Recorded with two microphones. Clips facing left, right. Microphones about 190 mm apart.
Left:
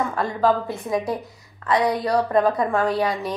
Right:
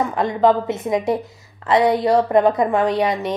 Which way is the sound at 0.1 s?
20° right (ahead or behind).